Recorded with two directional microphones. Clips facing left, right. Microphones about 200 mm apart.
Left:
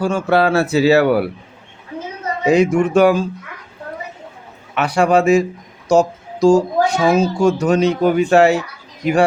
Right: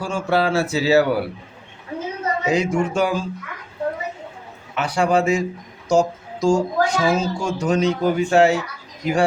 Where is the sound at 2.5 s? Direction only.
65° left (ahead or behind).